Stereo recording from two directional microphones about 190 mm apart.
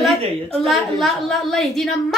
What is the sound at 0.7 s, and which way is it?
A woman's voice, centre (ahead or behind).